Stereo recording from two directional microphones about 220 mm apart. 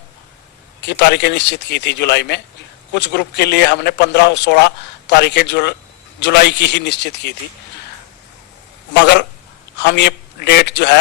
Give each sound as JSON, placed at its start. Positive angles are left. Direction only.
{"t": 0.8, "sound": "a man's voice", "side_deg": 50}
{"t": 8.9, "sound": "a man's voice", "side_deg": 50}